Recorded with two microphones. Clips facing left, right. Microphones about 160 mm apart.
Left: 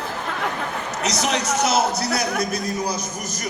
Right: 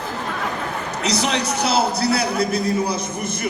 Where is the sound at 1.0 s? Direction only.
30° right (ahead or behind).